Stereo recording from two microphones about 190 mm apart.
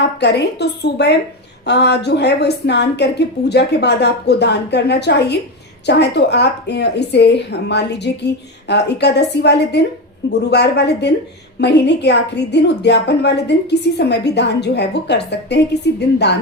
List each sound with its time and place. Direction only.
0.2 s a woman's voice: 60° left (ahead or behind)